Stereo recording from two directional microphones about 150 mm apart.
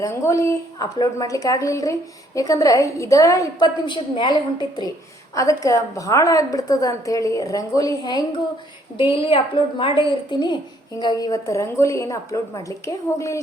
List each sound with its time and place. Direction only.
0.0 s a woman's voice: 20° left (ahead or behind)